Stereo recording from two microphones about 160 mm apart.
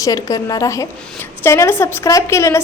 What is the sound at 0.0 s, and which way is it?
A woman's voice, 20° left (ahead or behind).